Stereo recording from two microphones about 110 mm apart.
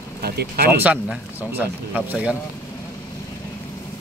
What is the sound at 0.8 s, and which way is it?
A man's voice, 10° right (ahead or behind).